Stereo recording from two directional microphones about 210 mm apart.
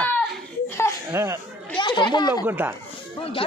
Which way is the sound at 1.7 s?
20° left (ahead or behind).